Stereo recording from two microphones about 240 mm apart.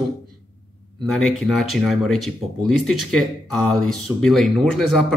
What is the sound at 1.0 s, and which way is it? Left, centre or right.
Speech, centre.